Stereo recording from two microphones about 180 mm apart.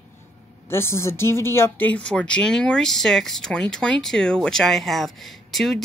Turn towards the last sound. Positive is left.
turn(degrees=0)  # may be behind; listen again after turning